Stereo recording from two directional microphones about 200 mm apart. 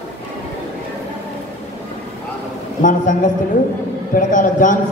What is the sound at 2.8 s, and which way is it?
A man's voice, 40° left (ahead or behind).